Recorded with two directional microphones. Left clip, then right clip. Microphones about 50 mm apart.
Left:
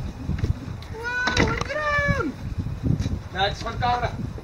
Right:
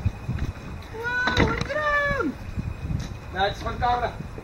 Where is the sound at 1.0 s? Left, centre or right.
Centre.